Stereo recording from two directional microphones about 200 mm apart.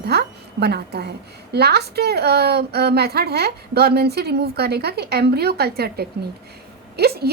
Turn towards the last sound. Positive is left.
turn(degrees=-50)  # may be behind; listen again after turning